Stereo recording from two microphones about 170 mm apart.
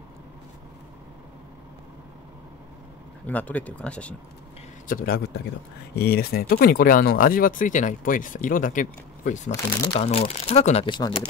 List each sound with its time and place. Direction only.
3.3 s speech: 10° left (ahead or behind)
4.8 s speech: 60° left (ahead or behind)
9.9 s speech: 35° left (ahead or behind)
11.0 s speech: 25° left (ahead or behind)